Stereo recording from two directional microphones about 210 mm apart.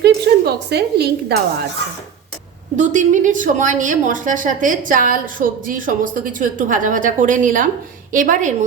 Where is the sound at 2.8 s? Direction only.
35° right (ahead or behind).